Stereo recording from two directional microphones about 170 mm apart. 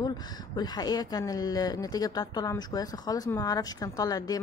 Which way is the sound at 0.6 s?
25° left (ahead or behind).